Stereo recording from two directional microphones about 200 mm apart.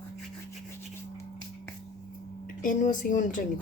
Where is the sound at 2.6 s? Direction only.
40° left (ahead or behind).